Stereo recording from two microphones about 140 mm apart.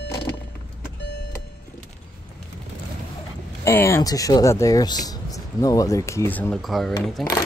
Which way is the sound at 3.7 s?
20° left (ahead or behind).